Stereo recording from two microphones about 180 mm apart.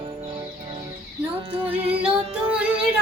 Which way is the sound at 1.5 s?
30° right (ahead or behind).